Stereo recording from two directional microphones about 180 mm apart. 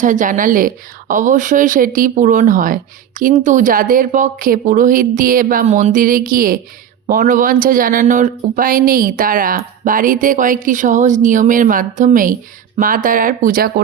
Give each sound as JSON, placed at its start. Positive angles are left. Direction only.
{"t": 0.0, "sound": "speech", "side_deg": -45}